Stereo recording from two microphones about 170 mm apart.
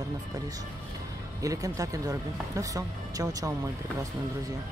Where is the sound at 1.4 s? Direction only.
20° right (ahead or behind).